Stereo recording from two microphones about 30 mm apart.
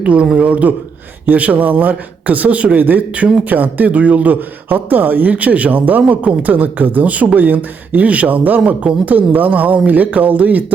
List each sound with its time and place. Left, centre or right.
0.0 s speech: right
1.4 s speech: right
2.7 s speech: right
3.9 s speech: right
5.3 s speech: right
5.7 s speech: right
8.6 s speech: right
9.0 s speech: right